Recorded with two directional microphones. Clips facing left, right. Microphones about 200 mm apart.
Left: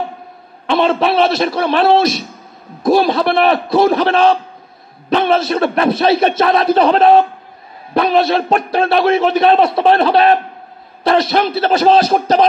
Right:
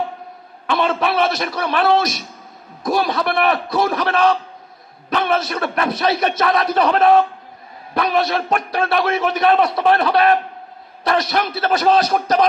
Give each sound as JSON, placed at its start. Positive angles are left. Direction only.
{"t": 0.7, "sound": "a man's voice", "side_deg": 30}